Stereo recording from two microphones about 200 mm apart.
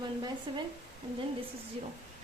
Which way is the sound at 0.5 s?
25° right (ahead or behind).